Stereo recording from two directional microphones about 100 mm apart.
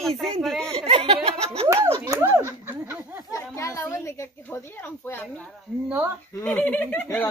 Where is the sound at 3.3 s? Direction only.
30° left (ahead or behind).